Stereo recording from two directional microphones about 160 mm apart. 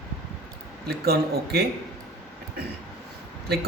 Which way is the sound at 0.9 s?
80° right.